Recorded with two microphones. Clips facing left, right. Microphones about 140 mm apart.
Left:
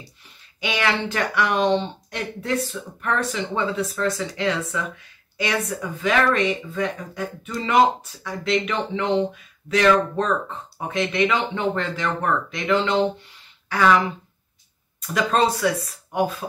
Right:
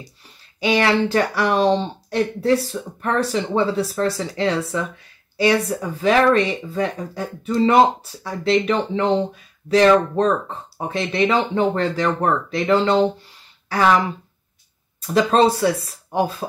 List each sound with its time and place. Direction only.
0.6 s speech: 35° right (ahead or behind)